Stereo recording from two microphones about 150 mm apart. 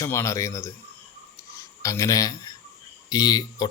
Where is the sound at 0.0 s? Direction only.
20° left (ahead or behind).